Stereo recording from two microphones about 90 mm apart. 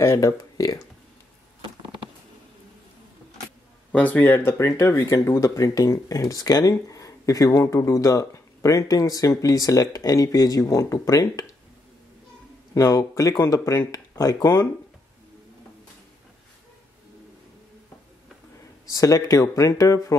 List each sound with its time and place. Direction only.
0.0 s speech: 30° left (ahead or behind)
3.9 s speech: 15° left (ahead or behind); by 11.4 s 40° left (ahead or behind)
12.7 s speech: 40° left (ahead or behind)
18.9 s speech: 40° left (ahead or behind)